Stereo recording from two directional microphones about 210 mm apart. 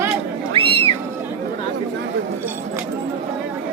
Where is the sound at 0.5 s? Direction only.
25° right (ahead or behind).